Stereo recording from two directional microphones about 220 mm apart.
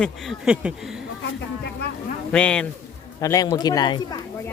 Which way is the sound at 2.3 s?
5° left (ahead or behind).